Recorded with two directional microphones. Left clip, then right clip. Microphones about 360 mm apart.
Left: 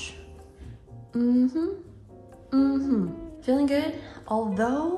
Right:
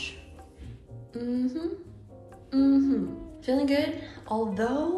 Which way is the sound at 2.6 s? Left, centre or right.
Left.